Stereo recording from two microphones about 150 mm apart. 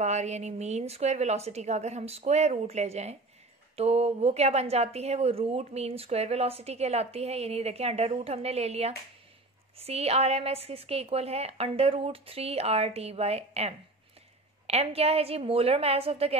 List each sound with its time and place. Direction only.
0.0 s speech: 50° right (ahead or behind)